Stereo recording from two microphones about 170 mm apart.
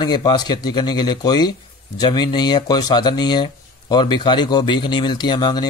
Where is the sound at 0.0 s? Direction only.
25° left (ahead or behind).